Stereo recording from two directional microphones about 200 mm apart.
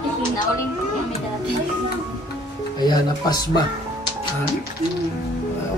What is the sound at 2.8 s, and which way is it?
Speech, 20° left (ahead or behind).